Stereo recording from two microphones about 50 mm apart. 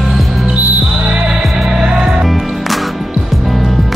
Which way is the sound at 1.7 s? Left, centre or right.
Centre.